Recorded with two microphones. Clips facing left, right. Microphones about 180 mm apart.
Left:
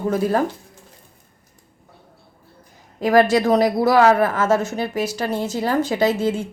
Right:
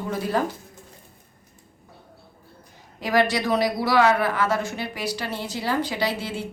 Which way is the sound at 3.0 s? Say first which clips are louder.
Left 7 dB; 45° left (ahead or behind).